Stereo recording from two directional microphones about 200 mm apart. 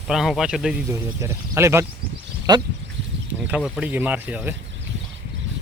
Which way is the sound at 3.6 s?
5° right (ahead or behind).